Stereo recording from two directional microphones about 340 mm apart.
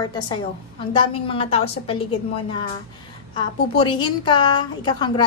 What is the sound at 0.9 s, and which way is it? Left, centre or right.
A woman's voice, centre.